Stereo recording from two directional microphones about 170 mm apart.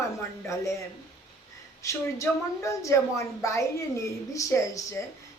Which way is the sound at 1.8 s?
20° left (ahead or behind).